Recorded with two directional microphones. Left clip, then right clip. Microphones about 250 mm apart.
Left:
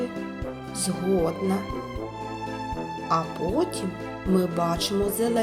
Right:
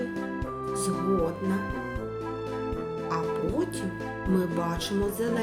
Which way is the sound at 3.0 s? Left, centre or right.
Centre.